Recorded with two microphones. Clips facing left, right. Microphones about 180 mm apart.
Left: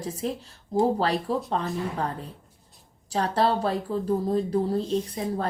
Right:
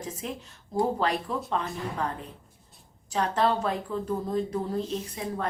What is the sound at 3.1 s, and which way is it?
A woman's voice, 35° left (ahead or behind).